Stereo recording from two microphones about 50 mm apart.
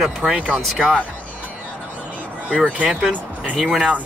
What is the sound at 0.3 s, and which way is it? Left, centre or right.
Speech, right.